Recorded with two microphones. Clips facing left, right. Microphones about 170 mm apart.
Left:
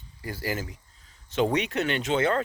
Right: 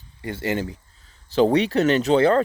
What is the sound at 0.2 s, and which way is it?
Speech, 25° right (ahead or behind).